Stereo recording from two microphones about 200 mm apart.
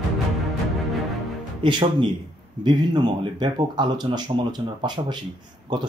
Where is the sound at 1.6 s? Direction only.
25° right (ahead or behind).